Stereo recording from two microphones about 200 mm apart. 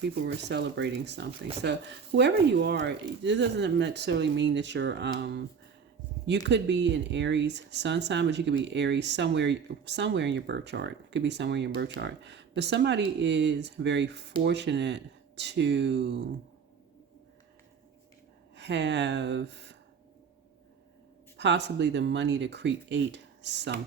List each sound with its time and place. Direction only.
0.0 s speech: 60° right (ahead or behind)
18.5 s speech: 60° right (ahead or behind)
21.3 s speech: 60° right (ahead or behind)